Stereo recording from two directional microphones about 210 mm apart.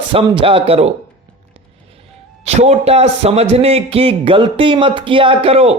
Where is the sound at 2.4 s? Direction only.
30° right (ahead or behind).